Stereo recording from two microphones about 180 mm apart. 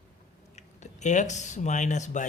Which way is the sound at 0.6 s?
40° left (ahead or behind).